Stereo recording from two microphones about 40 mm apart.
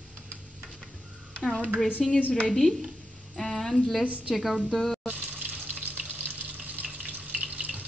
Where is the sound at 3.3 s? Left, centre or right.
Centre.